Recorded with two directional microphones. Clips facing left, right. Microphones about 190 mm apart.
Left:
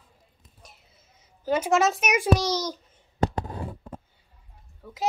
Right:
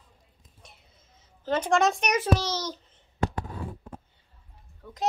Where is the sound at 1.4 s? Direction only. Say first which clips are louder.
Left 1 dB; 10° left (ahead or behind).